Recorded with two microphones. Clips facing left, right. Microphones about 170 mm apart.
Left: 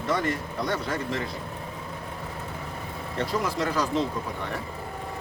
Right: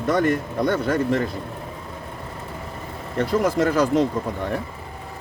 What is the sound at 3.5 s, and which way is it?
Speech, 50° right (ahead or behind).